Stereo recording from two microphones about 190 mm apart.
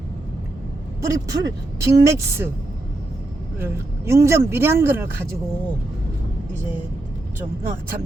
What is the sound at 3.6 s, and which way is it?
Speech, 15° right (ahead or behind).